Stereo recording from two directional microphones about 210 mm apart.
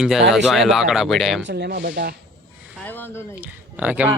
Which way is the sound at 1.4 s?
50° right (ahead or behind).